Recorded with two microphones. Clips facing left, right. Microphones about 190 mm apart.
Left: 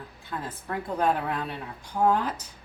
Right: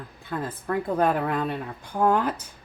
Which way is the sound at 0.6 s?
55° right (ahead or behind).